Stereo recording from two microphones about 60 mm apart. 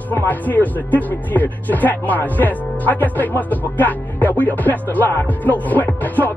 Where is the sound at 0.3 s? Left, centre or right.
Left.